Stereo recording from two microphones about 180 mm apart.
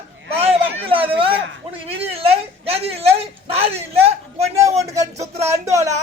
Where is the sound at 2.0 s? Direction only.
35° right (ahead or behind).